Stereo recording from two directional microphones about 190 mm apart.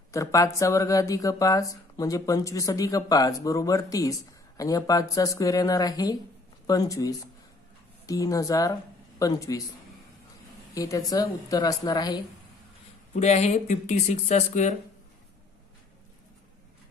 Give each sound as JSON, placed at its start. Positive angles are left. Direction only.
{"t": 0.1, "sound": "a woman's voice", "side_deg": 15}
{"t": 10.7, "sound": "a woman's voice", "side_deg": 15}
{"t": 13.1, "sound": "speech", "side_deg": 35}